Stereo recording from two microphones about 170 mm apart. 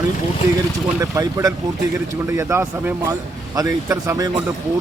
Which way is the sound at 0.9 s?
20° right (ahead or behind).